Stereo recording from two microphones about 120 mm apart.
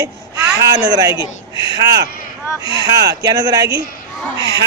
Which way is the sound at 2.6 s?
45° left (ahead or behind).